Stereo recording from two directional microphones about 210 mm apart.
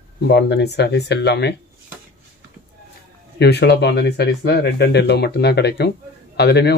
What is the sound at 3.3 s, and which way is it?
Speech, 50° left (ahead or behind).